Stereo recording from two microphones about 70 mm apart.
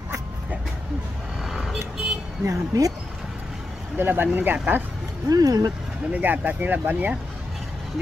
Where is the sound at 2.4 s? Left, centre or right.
Right.